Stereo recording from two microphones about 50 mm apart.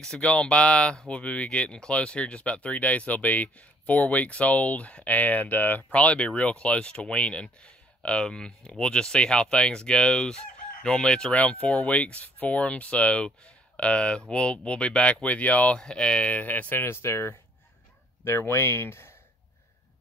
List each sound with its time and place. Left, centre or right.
0.0 s speech: centre
15.8 s speech: centre
16.3 s speech: left
16.8 s speech: left